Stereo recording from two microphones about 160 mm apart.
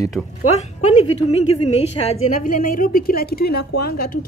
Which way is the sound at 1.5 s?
40° left (ahead or behind).